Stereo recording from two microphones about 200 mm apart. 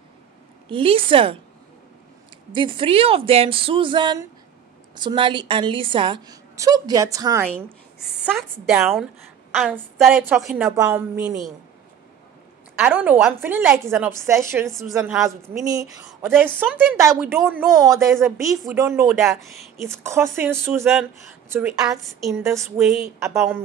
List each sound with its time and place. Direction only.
0.7 s a woman's voice: 25° right (ahead or behind)
2.5 s a woman's voice: 25° right (ahead or behind)
7.4 s a woman's voice: centre (ahead or behind)
12.7 s a woman's voice: 10° right (ahead or behind)
14.7 s a woman's voice: centre (ahead or behind)
15.2 s a woman's voice: 15° right (ahead or behind)